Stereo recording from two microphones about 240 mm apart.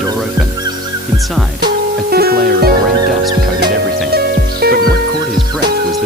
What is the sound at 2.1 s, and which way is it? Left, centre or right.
Music, right.